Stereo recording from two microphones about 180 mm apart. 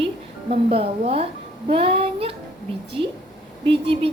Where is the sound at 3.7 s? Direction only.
30° right (ahead or behind).